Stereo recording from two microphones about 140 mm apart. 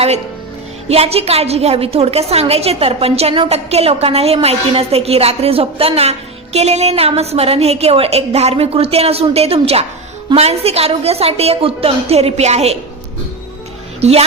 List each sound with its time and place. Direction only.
0.9 s a woman's voice: 45° right (ahead or behind)
14.0 s a woman's voice: 50° right (ahead or behind)